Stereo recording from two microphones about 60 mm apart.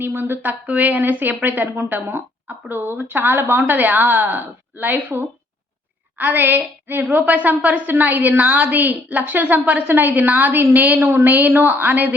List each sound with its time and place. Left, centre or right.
0.0 s a woman's voice: right
0.7 s a woman's voice: right